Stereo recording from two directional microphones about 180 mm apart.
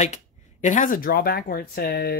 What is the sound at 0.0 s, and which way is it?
A man's voice, 40° left (ahead or behind).